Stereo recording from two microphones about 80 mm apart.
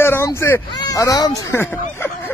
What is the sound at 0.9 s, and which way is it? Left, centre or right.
Speech, left.